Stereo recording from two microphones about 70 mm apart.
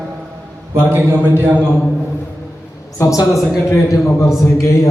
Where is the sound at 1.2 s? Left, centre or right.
Centre.